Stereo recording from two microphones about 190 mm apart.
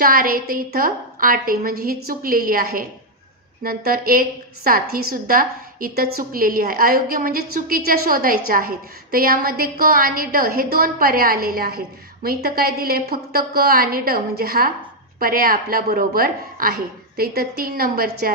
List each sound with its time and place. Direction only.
0.0 s a woman's voice: 50° right (ahead or behind)